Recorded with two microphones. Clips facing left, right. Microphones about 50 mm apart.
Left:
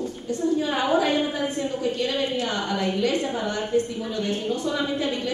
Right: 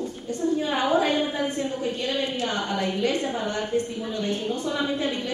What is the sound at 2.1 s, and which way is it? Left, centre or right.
Speech, left.